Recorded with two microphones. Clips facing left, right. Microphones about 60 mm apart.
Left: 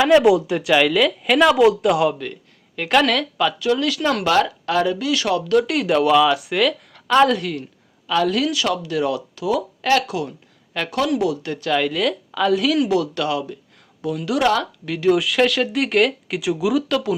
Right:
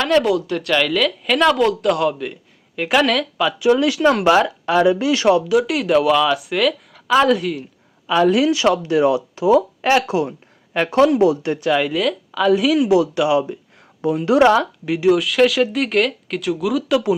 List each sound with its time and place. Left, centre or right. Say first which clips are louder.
0.0 s speech: left 3 dB; centre
2.2 s speech: right 3 dB; centre
3.6 s speech: right 5 dB; right
5.5 s speech: right 1 dB; centre
8.0 s speech: right 4 dB; centre
11.7 s a woman's voice: right 1 dB; centre; by 14.5 s right
14.5 s a woman's voice: right 4 dB; centre
15.1 s speech: right 2 dB; centre